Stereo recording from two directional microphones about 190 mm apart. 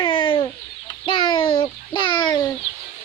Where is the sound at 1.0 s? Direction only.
25° left (ahead or behind).